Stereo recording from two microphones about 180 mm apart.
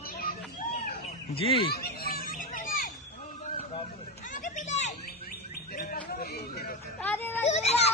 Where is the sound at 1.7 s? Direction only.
55° left (ahead or behind).